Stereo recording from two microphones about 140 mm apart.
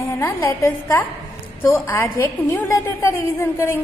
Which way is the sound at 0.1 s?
20° left (ahead or behind).